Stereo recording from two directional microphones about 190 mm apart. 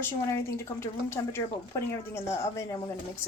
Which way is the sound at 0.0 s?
15° left (ahead or behind).